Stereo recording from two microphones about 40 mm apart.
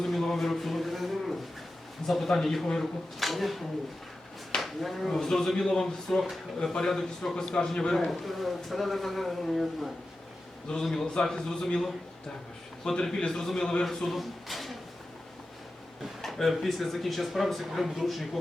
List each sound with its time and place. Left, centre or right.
0.0 s a sound: centre
2.0 s speech: centre
4.6 s speech: centre
10.8 s speech: centre
13.4 s speech: centre
16.2 s speech: centre